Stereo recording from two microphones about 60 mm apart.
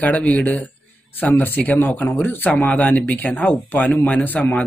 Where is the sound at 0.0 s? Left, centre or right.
Left.